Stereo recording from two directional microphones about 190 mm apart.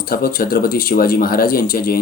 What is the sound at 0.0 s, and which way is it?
Speech, 50° left (ahead or behind).